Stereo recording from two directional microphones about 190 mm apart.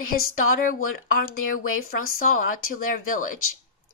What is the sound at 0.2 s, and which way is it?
Speech, 90° left.